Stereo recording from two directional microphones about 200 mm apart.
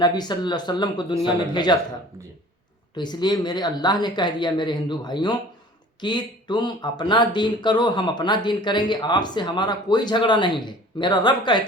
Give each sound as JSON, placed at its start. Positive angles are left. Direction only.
{"t": 0.0, "sound": "speech", "side_deg": 20}
{"t": 2.9, "sound": "speech", "side_deg": 20}